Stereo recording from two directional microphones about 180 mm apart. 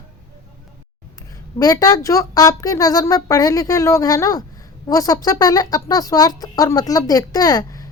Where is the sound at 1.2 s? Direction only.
20° left (ahead or behind).